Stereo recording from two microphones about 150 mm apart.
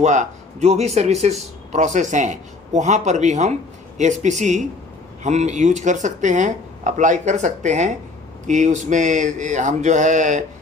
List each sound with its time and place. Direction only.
0.0 s speech: 50° right (ahead or behind)